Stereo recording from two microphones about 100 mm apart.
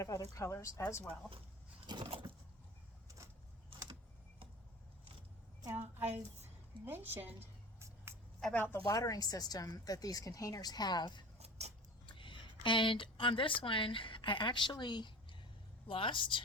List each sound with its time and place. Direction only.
0.0 s speech: 30° left (ahead or behind)
2.0 s a sound: 70° right (ahead or behind)
5.7 s a woman's voice: 20° right (ahead or behind)
6.8 s a sound: 20° right (ahead or behind)
8.5 s speech: 20° left (ahead or behind)
8.9 s speech: 35° left (ahead or behind)
11.3 s vehicle: 90° right
12.0 s a sound: 55° left (ahead or behind)
12.6 s speech: 55° left (ahead or behind)